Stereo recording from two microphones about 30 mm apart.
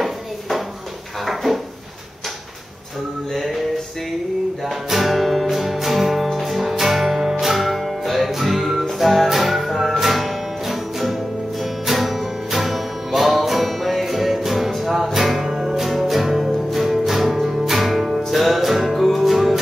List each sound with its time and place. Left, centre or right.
0.0 s a sound: centre
1.2 s drawer open or close: centre
4.8 s music: centre